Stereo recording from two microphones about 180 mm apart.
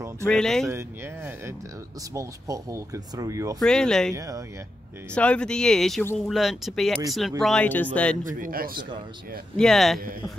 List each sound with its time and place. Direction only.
0.3 s speech: 5° left (ahead or behind)
0.7 s speech: 15° right (ahead or behind)
3.5 s speech: 5° left (ahead or behind)
4.1 s speech: 20° right (ahead or behind)
5.1 s speech: 5° left (ahead or behind)
8.2 s speech: 50° right (ahead or behind)
9.6 s speech: centre (ahead or behind)